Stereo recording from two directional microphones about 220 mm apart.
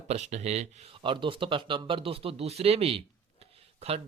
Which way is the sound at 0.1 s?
30° right (ahead or behind).